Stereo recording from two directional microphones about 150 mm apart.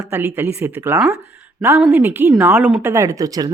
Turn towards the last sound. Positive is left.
turn(degrees=-25)  # may be behind; listen again after turning